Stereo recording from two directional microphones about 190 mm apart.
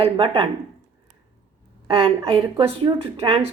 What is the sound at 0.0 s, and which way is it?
Speech, 30° right (ahead or behind).